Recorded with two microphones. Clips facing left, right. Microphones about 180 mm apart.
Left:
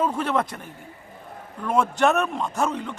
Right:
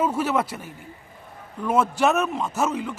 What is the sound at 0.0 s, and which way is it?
A man's voice, 5° right (ahead or behind).